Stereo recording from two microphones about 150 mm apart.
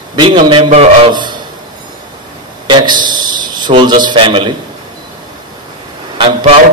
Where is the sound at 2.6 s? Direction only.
30° right (ahead or behind).